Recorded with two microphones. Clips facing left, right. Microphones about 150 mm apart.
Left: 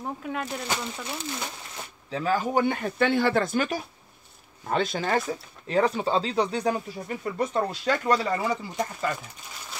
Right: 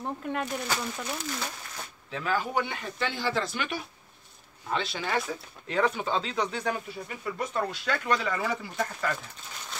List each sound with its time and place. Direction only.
0.0 s speech: centre (ahead or behind)
1.0 s speech: 15° left (ahead or behind)
2.0 s speech: 35° left (ahead or behind)
5.7 s speech: 35° left (ahead or behind)
8.5 s speech: 20° left (ahead or behind)